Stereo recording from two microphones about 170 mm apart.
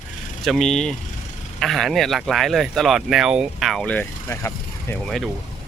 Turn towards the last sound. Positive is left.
turn(degrees=0)  # may be behind; listen again after turning